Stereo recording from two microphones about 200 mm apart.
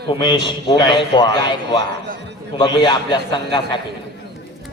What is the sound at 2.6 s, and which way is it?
A man's voice, 20° left (ahead or behind).